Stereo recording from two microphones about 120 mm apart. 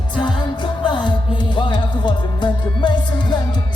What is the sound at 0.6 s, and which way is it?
Music, 40° left (ahead or behind).